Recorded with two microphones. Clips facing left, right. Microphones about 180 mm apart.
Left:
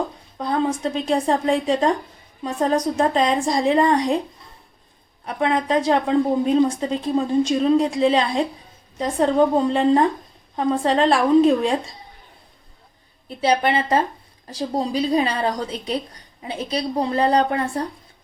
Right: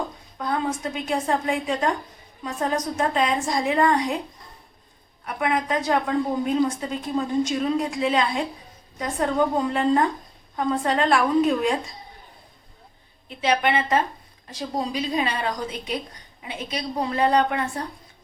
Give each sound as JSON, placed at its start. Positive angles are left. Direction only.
{"t": 0.3, "sound": "a woman's voice", "side_deg": 30}
{"t": 5.2, "sound": "a woman's voice", "side_deg": 30}
{"t": 13.2, "sound": "a woman's voice", "side_deg": 35}